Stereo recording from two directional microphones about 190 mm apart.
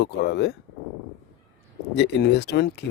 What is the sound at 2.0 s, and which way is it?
Speech, 60° left (ahead or behind).